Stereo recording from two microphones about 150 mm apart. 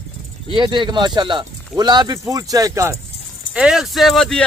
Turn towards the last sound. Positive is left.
turn(degrees=5)  # may be behind; listen again after turning